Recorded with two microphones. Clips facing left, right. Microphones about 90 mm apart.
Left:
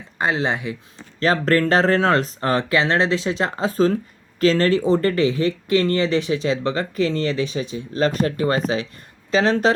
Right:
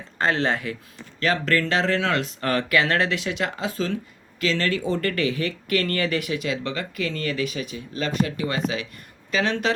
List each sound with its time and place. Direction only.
0.2 s speech: 15° left (ahead or behind)
1.2 s speech: 35° left (ahead or behind)